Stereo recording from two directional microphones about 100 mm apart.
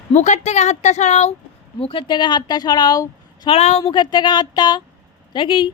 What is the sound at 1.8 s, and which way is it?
Speech, 60° left (ahead or behind).